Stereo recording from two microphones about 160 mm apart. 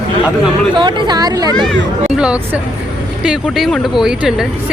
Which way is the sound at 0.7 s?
30° right (ahead or behind).